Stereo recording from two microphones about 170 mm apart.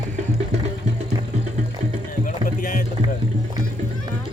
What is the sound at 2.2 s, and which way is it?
Music, 50° left (ahead or behind).